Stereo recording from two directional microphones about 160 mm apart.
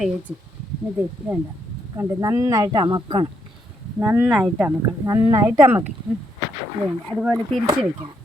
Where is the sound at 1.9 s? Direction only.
15° right (ahead or behind).